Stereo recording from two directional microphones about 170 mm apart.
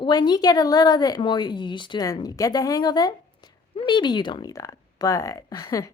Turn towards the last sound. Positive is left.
turn(degrees=20)  # may be behind; listen again after turning